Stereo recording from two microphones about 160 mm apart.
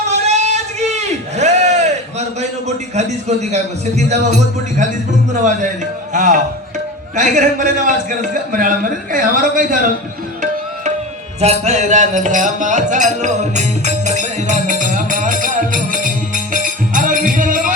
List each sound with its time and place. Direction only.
0.1 s a sound: 45° right (ahead or behind)
5.3 s a man's voice: 50° right (ahead or behind)
11.3 s music: 45° right (ahead or behind)